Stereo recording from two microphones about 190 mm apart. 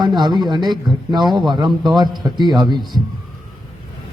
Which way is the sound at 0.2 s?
20° right (ahead or behind).